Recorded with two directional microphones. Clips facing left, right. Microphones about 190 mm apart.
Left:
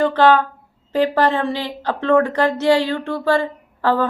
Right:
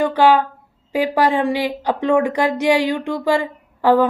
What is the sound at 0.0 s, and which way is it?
Speech, 10° right (ahead or behind).